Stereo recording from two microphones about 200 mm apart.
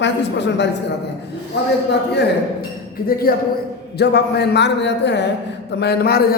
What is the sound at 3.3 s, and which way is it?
A man's voice, 45° left (ahead or behind).